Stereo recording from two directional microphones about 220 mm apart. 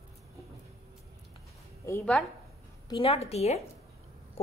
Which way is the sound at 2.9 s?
25° left (ahead or behind).